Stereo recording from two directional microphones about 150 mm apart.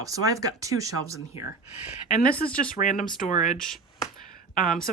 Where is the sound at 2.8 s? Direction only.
60° left (ahead or behind).